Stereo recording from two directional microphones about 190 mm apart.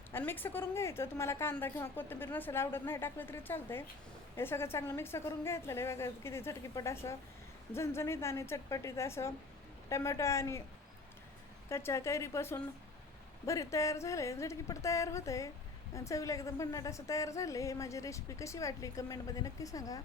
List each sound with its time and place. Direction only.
0.1 s a woman's voice: 10° left (ahead or behind)
11.7 s a woman's voice: 15° left (ahead or behind)